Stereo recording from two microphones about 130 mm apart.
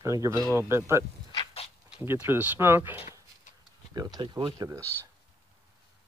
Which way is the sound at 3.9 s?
30° right (ahead or behind).